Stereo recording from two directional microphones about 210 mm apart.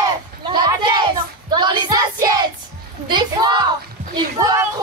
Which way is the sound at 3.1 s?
20° right (ahead or behind).